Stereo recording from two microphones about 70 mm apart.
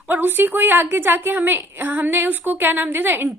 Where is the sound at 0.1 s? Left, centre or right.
Right.